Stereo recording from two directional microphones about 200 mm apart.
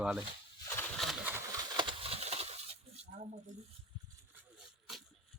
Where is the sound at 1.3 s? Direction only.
20° right (ahead or behind).